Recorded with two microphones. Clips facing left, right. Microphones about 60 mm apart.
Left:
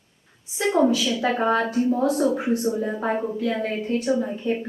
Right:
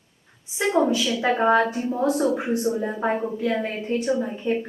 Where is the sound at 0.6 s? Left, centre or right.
Centre.